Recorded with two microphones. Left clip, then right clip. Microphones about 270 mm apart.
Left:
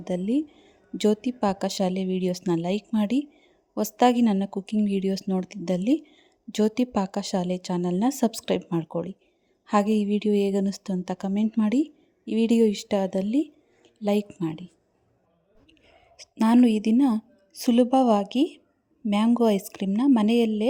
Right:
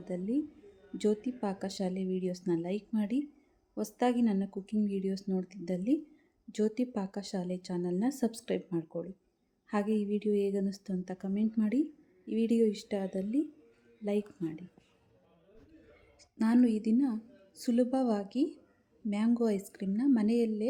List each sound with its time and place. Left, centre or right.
0.0 s a woman's voice: left
16.1 s a woman's voice: left